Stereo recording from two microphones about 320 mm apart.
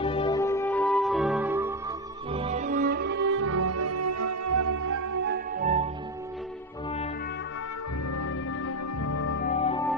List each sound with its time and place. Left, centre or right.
0.0 s music: centre
2.3 s music: centre; by 5.2 s right
5.2 s music: right
8.1 s music: left
9.4 s music: left